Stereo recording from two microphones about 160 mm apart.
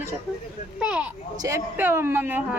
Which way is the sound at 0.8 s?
5° right (ahead or behind).